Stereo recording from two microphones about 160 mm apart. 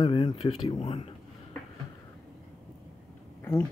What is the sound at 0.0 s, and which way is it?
Speech, 30° left (ahead or behind).